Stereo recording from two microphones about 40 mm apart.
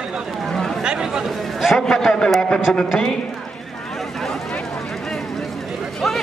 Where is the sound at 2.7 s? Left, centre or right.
Left.